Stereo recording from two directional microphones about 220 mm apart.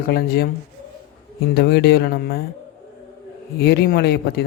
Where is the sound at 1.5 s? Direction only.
45° left (ahead or behind).